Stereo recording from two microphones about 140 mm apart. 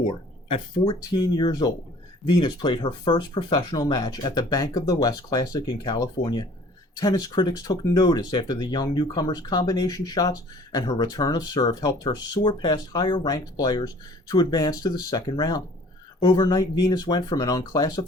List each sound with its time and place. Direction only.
0.5 s speech: 35° left (ahead or behind)